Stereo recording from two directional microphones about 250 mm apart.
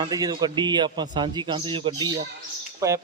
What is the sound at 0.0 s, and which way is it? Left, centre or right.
A man's voice, centre.